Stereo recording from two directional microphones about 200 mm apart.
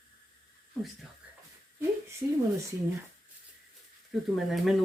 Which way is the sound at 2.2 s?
20° right (ahead or behind).